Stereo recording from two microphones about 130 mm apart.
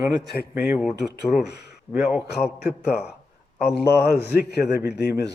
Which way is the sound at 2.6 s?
10° right (ahead or behind).